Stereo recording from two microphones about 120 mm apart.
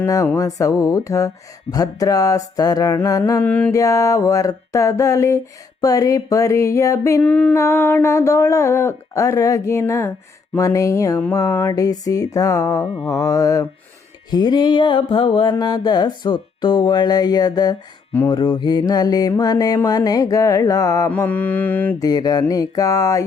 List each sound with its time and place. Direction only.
0.0 s speech: 30° left (ahead or behind)
3.4 s mantra: 10° left (ahead or behind)
3.7 s speech: 25° left (ahead or behind)
7.2 s mantra: 10° left (ahead or behind)
7.5 s speech: 20° left (ahead or behind)
14.3 s music: 35° left (ahead or behind)
20.1 s speech: 30° left (ahead or behind)
21.1 s mantra: 15° left (ahead or behind)
22.0 s speech: 35° left (ahead or behind)